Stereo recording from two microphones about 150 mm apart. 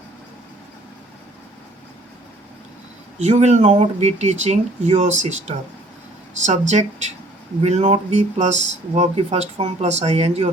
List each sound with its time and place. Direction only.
3.2 s speech: 50° right (ahead or behind)